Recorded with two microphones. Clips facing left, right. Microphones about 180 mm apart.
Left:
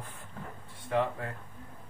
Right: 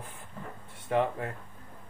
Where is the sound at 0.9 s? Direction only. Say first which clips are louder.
Right 2 dB; 25° right (ahead or behind).